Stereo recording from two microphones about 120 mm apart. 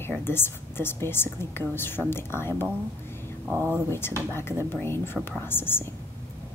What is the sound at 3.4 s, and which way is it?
Speech, 20° right (ahead or behind).